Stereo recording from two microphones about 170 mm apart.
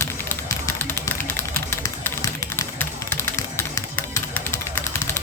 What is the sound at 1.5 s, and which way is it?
Music, 15° left (ahead or behind).